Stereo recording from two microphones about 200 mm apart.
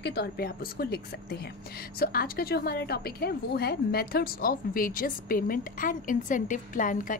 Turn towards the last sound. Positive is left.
turn(degrees=40)  # may be behind; listen again after turning